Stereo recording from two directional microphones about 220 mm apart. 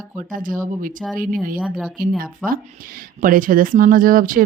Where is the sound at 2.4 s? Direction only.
40° right (ahead or behind).